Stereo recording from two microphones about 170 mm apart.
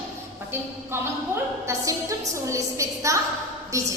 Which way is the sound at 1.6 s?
20° right (ahead or behind).